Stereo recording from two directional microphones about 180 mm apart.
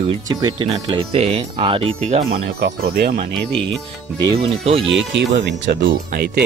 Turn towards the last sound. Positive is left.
turn(degrees=-65)  # may be behind; listen again after turning